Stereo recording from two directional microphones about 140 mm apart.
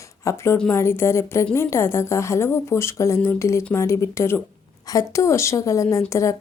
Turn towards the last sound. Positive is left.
turn(degrees=20)  # may be behind; listen again after turning